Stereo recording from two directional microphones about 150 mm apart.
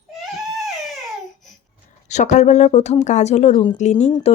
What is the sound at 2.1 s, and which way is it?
A woman's voice, 50° left (ahead or behind).